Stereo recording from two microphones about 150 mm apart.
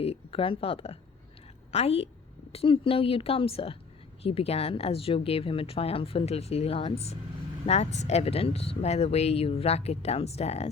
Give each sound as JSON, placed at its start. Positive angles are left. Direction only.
{"t": 0.0, "sound": "speech", "side_deg": 40}